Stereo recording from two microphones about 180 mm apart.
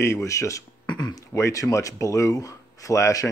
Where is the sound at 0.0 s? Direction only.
15° left (ahead or behind).